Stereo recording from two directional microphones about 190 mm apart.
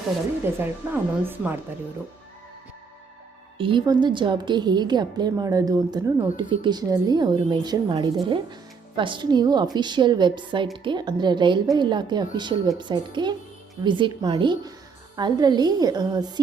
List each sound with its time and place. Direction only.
0.8 s a woman's voice: 10° right (ahead or behind)
3.6 s a woman's voice: 25° right (ahead or behind)